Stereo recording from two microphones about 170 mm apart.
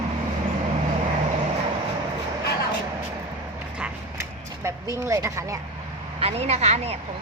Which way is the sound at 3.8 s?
15° right (ahead or behind).